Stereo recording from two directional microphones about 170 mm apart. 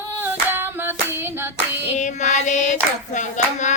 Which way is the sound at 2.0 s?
45° left (ahead or behind).